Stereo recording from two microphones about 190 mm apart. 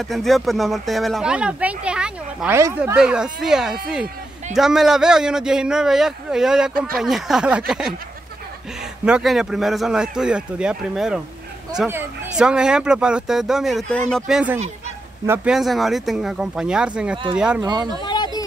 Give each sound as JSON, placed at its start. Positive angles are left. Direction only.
{"t": 0.0, "sound": "speech", "side_deg": 0}
{"t": 9.0, "sound": "speech", "side_deg": -5}
{"t": 17.6, "sound": "speech", "side_deg": -20}
{"t": 18.0, "sound": "a sound", "side_deg": 25}